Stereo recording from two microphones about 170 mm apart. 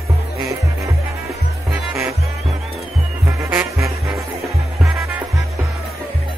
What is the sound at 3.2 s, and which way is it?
Music, 15° right (ahead or behind).